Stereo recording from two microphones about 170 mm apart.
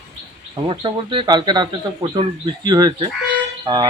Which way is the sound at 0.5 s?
25° right (ahead or behind).